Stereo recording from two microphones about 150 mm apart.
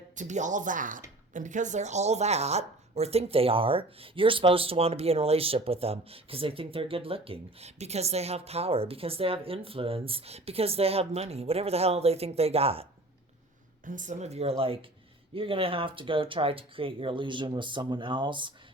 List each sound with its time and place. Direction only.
0.2 s speech: 55° right (ahead or behind)
13.8 s speech: 60° right (ahead or behind); by 18.5 s 30° right (ahead or behind)